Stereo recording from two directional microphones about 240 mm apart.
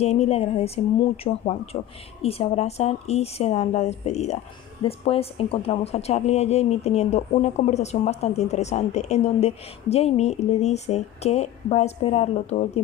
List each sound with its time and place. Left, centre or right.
0.0 s speech: left